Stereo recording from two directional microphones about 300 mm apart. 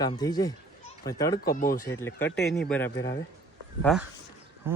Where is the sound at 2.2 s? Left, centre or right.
Left.